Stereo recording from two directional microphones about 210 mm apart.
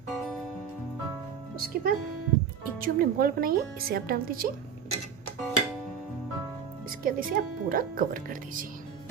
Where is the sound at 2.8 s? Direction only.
45° right (ahead or behind).